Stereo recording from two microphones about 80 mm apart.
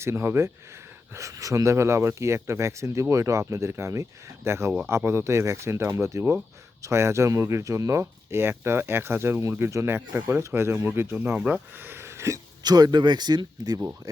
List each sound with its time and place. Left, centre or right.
0.0 s speech: right
11.3 s speech: centre; by 12.4 s right
12.6 s speech: right